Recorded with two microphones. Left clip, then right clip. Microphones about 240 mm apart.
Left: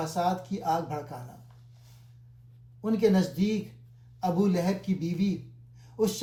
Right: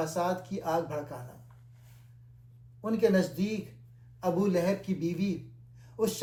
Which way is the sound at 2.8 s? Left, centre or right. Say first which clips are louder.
Left 1 dB; left.